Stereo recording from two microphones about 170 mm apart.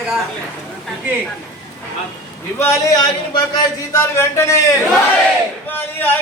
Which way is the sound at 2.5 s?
15° left (ahead or behind).